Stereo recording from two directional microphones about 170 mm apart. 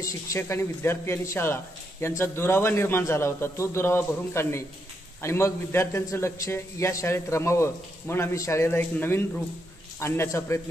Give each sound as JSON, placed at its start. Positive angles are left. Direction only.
{"t": 0.0, "sound": "speech", "side_deg": 15}